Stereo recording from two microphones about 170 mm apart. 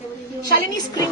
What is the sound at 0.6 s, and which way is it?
Speech, 25° left (ahead or behind).